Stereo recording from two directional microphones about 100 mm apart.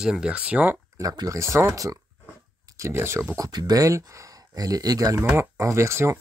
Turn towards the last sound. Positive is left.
turn(degrees=-30)  # may be behind; listen again after turning